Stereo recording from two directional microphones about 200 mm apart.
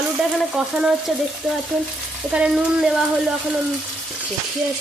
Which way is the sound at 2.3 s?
5° right (ahead or behind).